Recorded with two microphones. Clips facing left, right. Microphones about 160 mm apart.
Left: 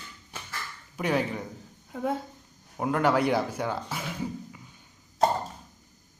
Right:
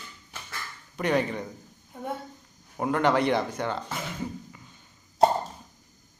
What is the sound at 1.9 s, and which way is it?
Speech, 90° left.